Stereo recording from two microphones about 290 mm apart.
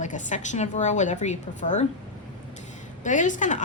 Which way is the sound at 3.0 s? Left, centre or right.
Left.